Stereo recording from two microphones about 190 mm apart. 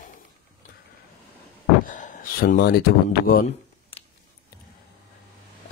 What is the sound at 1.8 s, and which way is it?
Speech, 40° left (ahead or behind).